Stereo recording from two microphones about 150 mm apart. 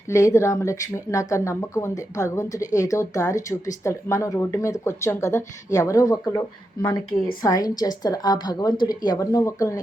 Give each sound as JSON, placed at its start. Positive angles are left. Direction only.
{"t": 0.1, "sound": "speech", "side_deg": 20}
{"t": 7.4, "sound": "speech", "side_deg": 25}